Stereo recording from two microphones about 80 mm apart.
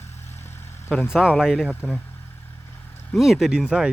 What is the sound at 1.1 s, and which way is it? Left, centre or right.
Speech, centre.